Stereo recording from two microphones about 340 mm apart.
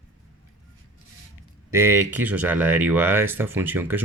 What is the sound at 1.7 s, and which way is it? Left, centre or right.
Speech, centre.